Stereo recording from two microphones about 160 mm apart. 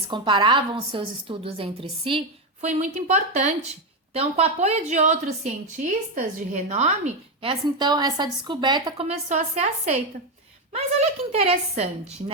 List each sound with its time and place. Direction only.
0.1 s a woman's voice: 30° right (ahead or behind); by 7.5 s 45° right (ahead or behind)
7.6 s a woman's voice: 25° right (ahead or behind)
9.0 s a woman's voice: 45° right (ahead or behind)
11.3 s a woman's voice: 40° right (ahead or behind)